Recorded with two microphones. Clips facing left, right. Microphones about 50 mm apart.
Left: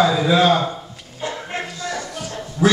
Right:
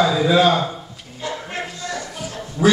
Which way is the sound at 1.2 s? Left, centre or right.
Left.